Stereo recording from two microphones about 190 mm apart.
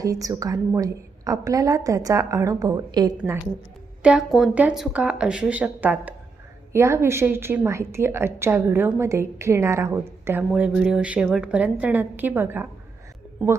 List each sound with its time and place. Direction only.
0.0 s a woman's voice: 20° right (ahead or behind)
4.0 s a woman's voice: 5° right (ahead or behind)